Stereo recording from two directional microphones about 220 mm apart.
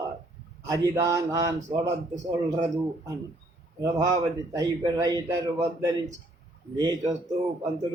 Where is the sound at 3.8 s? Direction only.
15° right (ahead or behind).